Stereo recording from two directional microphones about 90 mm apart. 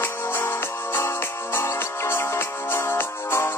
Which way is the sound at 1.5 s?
30° left (ahead or behind).